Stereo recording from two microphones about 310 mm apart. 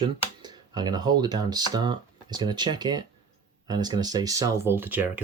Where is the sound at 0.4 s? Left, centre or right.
Centre.